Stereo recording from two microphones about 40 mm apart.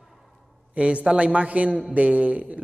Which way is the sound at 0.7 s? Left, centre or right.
Right.